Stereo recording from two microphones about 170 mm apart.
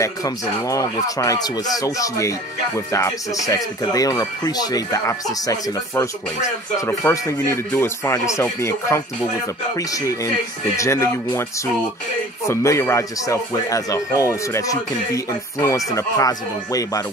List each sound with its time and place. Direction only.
0.0 s speech: 20° left (ahead or behind)